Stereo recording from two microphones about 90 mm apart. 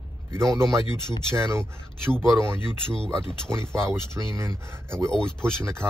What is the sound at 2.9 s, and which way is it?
Speech, 10° left (ahead or behind).